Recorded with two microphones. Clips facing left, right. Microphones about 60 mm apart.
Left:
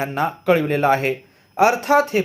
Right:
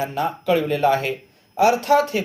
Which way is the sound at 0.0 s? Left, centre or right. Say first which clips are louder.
Left 2 dB; left.